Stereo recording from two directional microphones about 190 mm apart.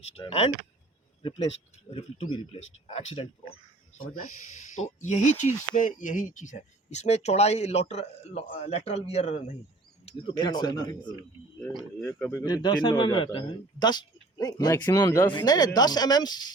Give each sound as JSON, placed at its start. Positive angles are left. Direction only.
{"t": 0.0, "sound": "speech", "side_deg": 30}
{"t": 1.9, "sound": "a man's voice", "side_deg": 30}
{"t": 4.9, "sound": "a man's voice", "side_deg": 40}
{"t": 11.6, "sound": "a man's voice", "side_deg": 5}